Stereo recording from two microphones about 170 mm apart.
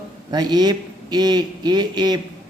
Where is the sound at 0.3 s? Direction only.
25° right (ahead or behind).